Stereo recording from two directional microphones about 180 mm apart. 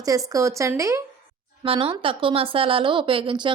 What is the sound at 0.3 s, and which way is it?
Speech, 15° right (ahead or behind).